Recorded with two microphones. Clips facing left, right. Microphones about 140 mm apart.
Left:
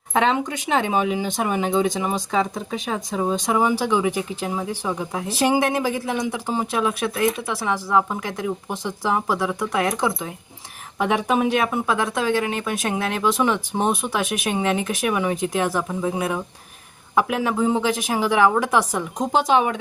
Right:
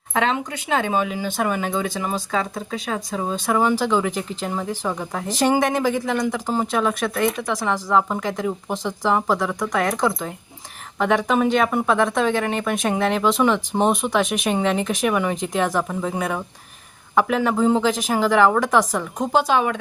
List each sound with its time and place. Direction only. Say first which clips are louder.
0.8 s speech: left 2 dB; 20° left (ahead or behind)